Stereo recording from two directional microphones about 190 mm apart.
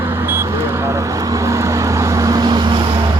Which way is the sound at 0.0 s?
10° right (ahead or behind).